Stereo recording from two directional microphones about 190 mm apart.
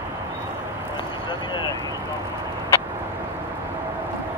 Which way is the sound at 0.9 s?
25° left (ahead or behind).